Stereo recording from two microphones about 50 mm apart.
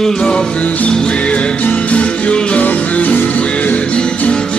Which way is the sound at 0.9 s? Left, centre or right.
Centre.